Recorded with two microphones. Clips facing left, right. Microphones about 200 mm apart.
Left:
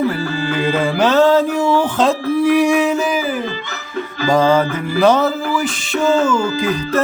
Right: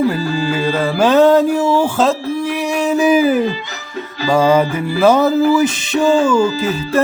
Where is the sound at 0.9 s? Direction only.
15° right (ahead or behind).